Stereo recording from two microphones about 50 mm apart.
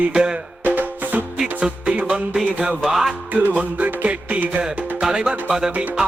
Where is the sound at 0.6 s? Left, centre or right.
Right.